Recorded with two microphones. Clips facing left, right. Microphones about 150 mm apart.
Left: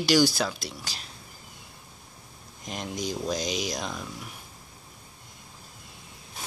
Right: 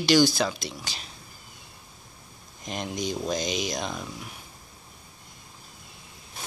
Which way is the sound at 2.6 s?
5° left (ahead or behind).